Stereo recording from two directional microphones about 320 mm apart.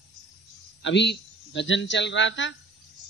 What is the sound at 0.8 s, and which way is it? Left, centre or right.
A man's voice, left.